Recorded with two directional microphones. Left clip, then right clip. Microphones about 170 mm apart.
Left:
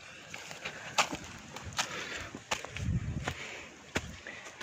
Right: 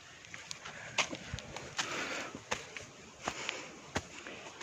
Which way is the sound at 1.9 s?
55° right (ahead or behind).